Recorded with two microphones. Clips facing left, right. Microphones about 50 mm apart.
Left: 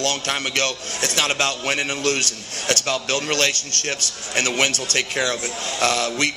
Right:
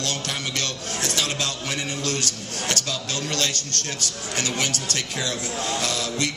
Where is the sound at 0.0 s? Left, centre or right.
Left.